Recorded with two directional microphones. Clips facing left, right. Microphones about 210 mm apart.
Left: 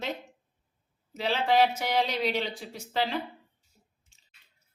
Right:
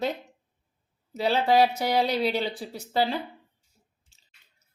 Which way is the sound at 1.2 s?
40° right (ahead or behind).